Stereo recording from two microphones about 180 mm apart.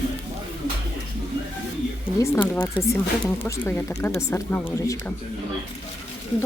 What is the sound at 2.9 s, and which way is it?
Speech, 15° left (ahead or behind).